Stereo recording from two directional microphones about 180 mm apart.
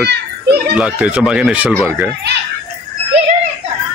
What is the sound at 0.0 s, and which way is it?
Children playing, 65° right (ahead or behind).